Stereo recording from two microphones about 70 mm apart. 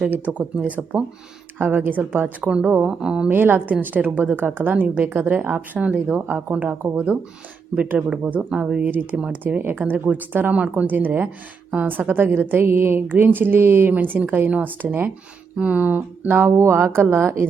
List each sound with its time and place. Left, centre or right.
0.3 s a woman's voice: centre
3.2 s a woman's voice: right